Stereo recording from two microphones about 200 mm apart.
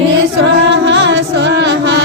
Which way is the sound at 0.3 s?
60° right (ahead or behind).